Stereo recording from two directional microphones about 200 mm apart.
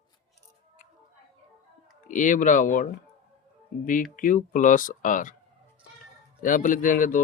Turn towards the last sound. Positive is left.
turn(degrees=40)  # may be behind; listen again after turning